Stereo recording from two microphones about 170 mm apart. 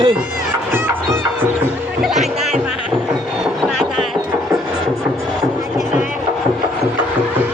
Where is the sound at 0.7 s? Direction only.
10° right (ahead or behind).